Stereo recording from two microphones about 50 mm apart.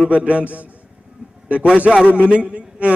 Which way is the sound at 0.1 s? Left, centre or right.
Right.